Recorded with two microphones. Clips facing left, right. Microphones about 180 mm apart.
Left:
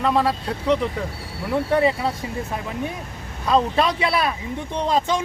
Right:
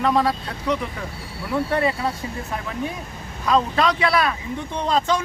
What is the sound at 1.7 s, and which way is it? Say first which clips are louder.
Speech: left 4 dB; 20° left (ahead or behind).